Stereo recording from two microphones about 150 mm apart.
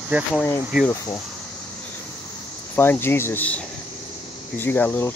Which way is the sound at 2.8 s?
15° left (ahead or behind).